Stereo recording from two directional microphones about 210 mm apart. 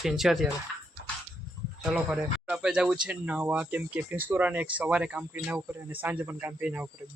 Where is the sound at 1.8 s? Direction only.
5° right (ahead or behind).